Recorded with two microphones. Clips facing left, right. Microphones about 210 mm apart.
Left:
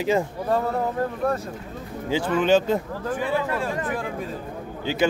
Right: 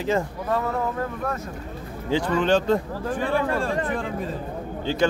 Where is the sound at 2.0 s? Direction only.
5° left (ahead or behind).